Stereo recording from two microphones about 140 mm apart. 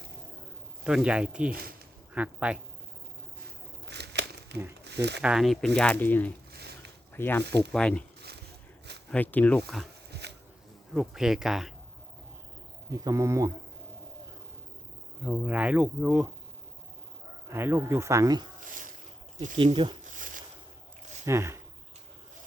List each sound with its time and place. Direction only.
0.9 s speech: 5° right (ahead or behind)
5.2 s speech: 5° right (ahead or behind)
9.0 s speech: 10° left (ahead or behind)
9.6 s speech: centre (ahead or behind)
10.9 s speech: 5° right (ahead or behind)
12.9 s speech: 25° right (ahead or behind)
15.2 s speech: 10° right (ahead or behind)
17.5 s speech: 15° right (ahead or behind)
19.5 s speech: 40° right (ahead or behind)
21.2 s speech: 20° right (ahead or behind)